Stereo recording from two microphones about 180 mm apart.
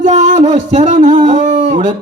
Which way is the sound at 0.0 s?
40° right (ahead or behind).